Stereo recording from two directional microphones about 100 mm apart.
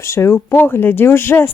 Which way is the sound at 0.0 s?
25° left (ahead or behind).